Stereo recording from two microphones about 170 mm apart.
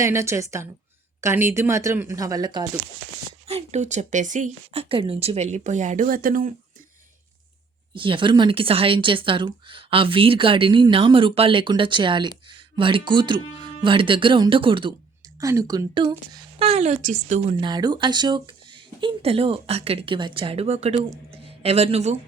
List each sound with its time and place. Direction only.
0.0 s speech: 15° right (ahead or behind)
3.4 s speech: 40° right (ahead or behind); by 6.5 s 55° right (ahead or behind)
7.9 s speech: 30° right (ahead or behind)
15.4 s speech: 20° right (ahead or behind)
16.6 s speech: 35° right (ahead or behind)
17.6 s speech: 25° right (ahead or behind)